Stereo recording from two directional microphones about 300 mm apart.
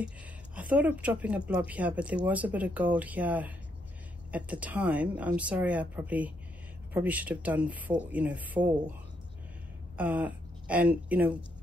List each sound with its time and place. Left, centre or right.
0.6 s speech: centre
9.9 s speech: centre